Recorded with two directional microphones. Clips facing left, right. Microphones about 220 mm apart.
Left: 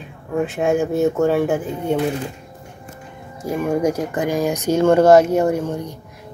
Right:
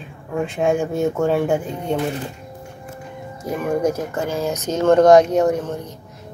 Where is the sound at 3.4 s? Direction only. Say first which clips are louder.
Left 1 dB; 10° left (ahead or behind).